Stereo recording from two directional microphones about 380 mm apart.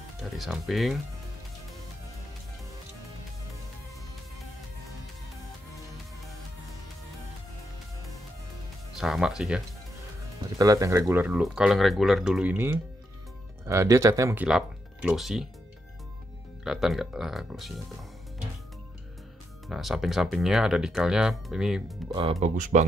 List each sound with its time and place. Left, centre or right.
0.2 s speech: centre
8.9 s speech: centre
10.6 s speech: centre
16.6 s speech: centre
19.7 s speech: centre
22.1 s speech: centre